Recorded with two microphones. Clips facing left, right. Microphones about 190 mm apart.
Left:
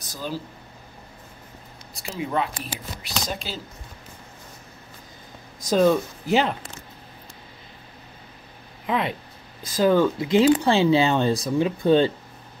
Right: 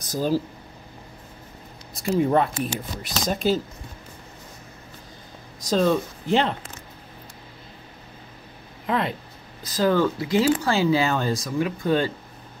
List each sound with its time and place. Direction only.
0.1 s speech: 40° right (ahead or behind)
2.1 s speech: 45° right (ahead or behind)
5.7 s speech: 10° left (ahead or behind)
8.8 s speech: 5° left (ahead or behind)
9.8 s speech: 15° left (ahead or behind)